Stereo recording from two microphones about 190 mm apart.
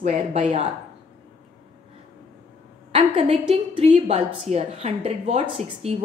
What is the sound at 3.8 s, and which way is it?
A woman's voice, 35° right (ahead or behind).